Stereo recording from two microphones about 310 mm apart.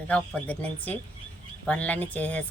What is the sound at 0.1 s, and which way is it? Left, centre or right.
Speech, centre.